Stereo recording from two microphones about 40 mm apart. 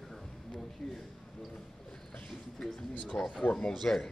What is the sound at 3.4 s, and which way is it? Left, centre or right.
Speech, left.